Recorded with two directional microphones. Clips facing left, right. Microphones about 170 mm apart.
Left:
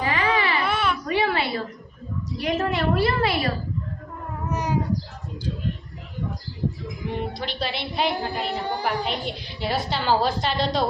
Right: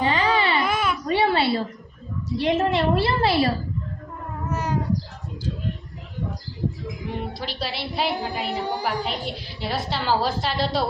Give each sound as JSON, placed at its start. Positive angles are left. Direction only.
{"t": 0.0, "sound": "baby cry", "side_deg": -30}
{"t": 0.7, "sound": "baby cry", "side_deg": -5}
{"t": 1.0, "sound": "a sound", "side_deg": -30}
{"t": 2.4, "sound": "a woman's voice", "side_deg": -25}
{"t": 4.4, "sound": "cat", "side_deg": 15}
{"t": 7.2, "sound": "a woman's voice", "side_deg": -5}